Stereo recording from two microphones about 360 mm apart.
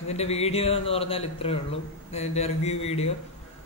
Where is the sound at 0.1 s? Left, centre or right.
Centre.